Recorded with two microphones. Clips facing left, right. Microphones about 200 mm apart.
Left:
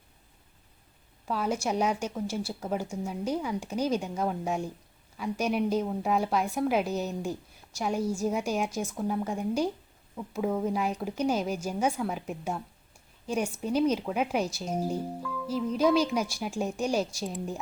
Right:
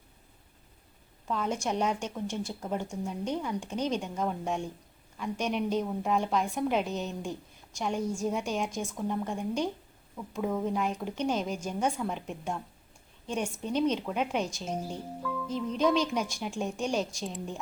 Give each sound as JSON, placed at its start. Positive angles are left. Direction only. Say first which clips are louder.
{"t": 1.3, "sound": "a woman's voice", "louder": "left 2 dB", "side_deg": 5}